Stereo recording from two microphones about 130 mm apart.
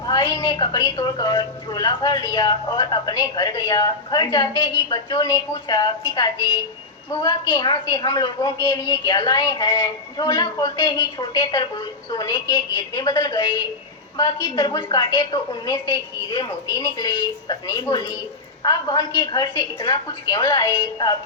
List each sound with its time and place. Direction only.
0.0 s a sound: 30° left (ahead or behind)
0.4 s a woman's voice: 35° left (ahead or behind)
7.1 s a woman's voice: 30° left (ahead or behind)